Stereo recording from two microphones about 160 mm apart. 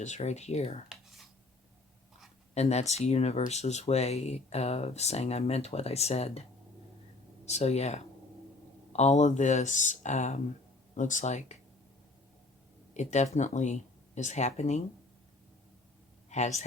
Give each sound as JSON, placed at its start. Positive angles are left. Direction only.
{"t": 0.0, "sound": "speech", "side_deg": 45}
{"t": 0.9, "sound": "a sound", "side_deg": 0}
{"t": 2.6, "sound": "speech", "side_deg": 40}
{"t": 7.4, "sound": "speech", "side_deg": 40}
{"t": 12.9, "sound": "speech", "side_deg": 45}
{"t": 16.3, "sound": "speech", "side_deg": 45}